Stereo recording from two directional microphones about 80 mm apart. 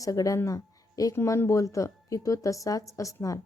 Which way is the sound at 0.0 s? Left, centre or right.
Left.